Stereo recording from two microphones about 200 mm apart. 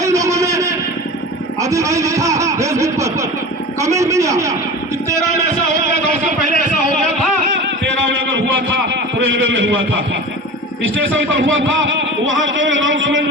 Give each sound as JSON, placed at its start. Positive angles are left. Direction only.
{"t": 0.0, "sound": "a sound", "side_deg": -15}
{"t": 1.6, "sound": "vehicle", "side_deg": -15}
{"t": 3.8, "sound": "a man's voice", "side_deg": -15}
{"t": 9.5, "sound": "speech", "side_deg": -70}